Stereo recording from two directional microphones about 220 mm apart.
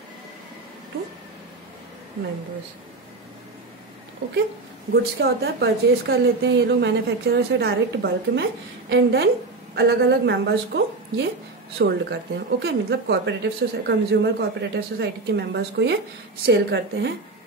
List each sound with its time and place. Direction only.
4.9 s speech: 45° right (ahead or behind)